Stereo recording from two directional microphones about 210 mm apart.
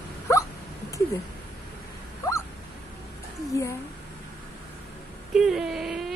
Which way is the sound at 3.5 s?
15° left (ahead or behind).